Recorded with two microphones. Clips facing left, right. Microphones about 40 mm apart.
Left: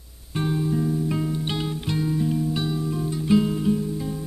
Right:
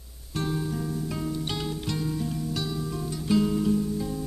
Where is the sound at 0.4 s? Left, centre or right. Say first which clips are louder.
Left 5 dB; centre.